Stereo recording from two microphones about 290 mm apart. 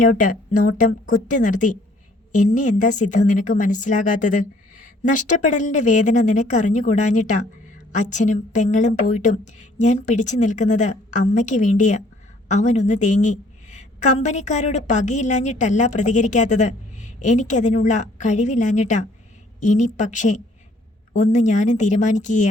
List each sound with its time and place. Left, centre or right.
0.0 s a woman's voice: left